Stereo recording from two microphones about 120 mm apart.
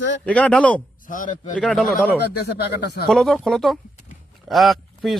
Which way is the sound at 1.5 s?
5° left (ahead or behind).